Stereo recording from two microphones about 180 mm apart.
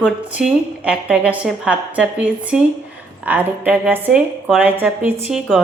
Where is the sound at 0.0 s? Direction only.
5° right (ahead or behind).